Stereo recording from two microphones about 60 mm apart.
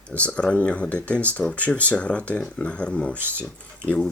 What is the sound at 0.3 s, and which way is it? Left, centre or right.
Speech, left.